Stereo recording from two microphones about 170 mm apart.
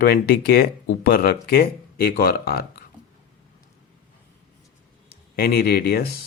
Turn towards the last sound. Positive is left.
turn(degrees=65)  # may be behind; listen again after turning